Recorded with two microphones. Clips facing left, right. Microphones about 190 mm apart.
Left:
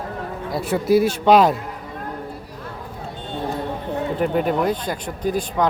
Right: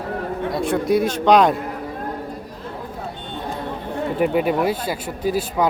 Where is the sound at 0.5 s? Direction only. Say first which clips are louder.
Left 2 dB; 5° left (ahead or behind).